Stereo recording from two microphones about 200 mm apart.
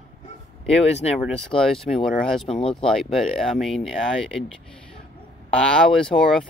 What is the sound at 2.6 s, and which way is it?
Speech, 25° left (ahead or behind).